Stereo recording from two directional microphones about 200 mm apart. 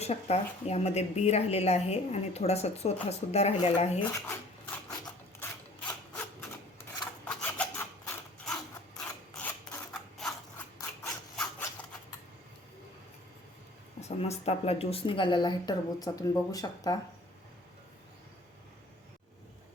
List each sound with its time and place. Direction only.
0.0 s speech: 30° left (ahead or behind)
4.0 s a sound: 15° left (ahead or behind)
5.4 s wood: 5° left (ahead or behind)
7.3 s rub: 10° left (ahead or behind)
9.4 s a sound: 5° left (ahead or behind)
10.9 s rub: 10° left (ahead or behind)
14.2 s speech: 30° left (ahead or behind)